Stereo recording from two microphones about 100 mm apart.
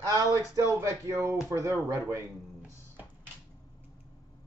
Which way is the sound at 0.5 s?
30° right (ahead or behind).